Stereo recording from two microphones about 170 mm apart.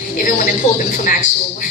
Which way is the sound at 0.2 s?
55° left (ahead or behind).